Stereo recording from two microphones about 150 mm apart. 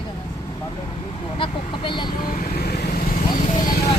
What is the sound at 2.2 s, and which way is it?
Vehicle, 75° left (ahead or behind).